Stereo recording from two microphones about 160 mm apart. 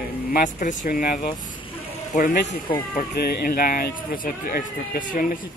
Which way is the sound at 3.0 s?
80° left.